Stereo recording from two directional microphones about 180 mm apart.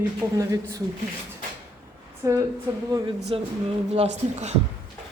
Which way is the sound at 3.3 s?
30° right (ahead or behind).